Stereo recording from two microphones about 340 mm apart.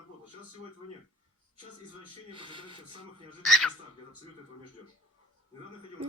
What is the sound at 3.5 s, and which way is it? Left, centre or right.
Speech, centre.